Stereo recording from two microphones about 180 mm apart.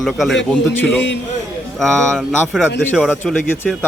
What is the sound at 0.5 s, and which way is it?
A man's voice, 10° left (ahead or behind).